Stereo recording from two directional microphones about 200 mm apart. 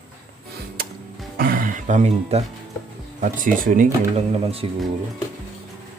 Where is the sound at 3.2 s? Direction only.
40° right (ahead or behind).